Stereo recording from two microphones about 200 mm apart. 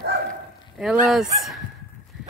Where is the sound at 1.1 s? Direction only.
Centre (ahead or behind).